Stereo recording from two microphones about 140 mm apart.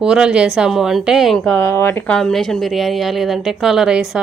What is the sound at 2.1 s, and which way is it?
A woman's voice, 5° left (ahead or behind).